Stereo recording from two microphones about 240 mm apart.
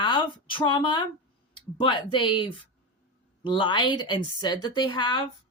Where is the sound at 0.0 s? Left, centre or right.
Centre.